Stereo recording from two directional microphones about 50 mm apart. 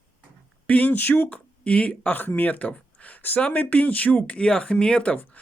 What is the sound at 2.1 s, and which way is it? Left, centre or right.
Speech, left.